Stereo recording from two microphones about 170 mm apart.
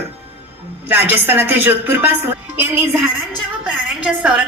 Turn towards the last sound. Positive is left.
turn(degrees=-5)  # may be behind; listen again after turning